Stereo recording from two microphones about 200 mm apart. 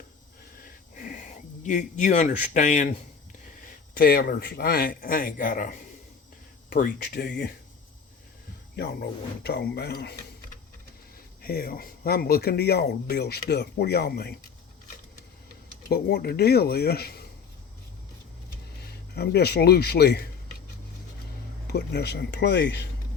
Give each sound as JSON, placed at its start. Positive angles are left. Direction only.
{"t": 0.6, "sound": "wheeze", "side_deg": 45}
{"t": 1.6, "sound": "a man's voice", "side_deg": 40}
{"t": 6.7, "sound": "speech", "side_deg": 50}
{"t": 8.7, "sound": "speech", "side_deg": 55}
{"t": 11.4, "sound": "speech", "side_deg": 50}
{"t": 15.9, "sound": "speech", "side_deg": 50}
{"t": 18.8, "sound": "speech", "side_deg": 55}
{"t": 21.7, "sound": "speech", "side_deg": 55}